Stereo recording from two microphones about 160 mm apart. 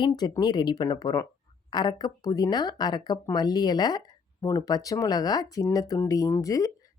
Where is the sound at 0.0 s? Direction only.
25° left (ahead or behind).